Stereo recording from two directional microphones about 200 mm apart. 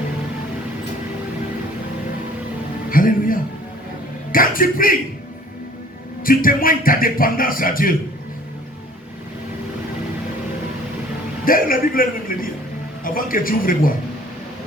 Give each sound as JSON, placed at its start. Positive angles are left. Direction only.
{"t": 2.9, "sound": "a man's voice", "side_deg": 45}
{"t": 6.2, "sound": "speech", "side_deg": 45}
{"t": 11.4, "sound": "speech", "side_deg": 45}